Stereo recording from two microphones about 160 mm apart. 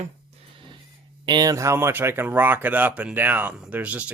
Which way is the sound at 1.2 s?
25° right (ahead or behind).